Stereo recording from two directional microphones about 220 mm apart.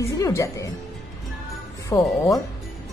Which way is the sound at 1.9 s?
20° left (ahead or behind).